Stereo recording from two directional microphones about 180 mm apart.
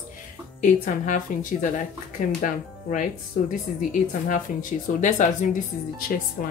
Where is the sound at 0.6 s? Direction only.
45° left (ahead or behind).